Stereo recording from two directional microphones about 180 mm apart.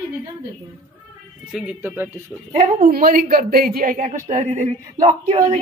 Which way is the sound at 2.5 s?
35° right (ahead or behind).